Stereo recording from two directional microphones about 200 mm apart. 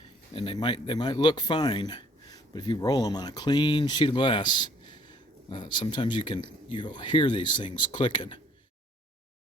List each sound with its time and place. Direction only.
0.3 s speech: 25° left (ahead or behind)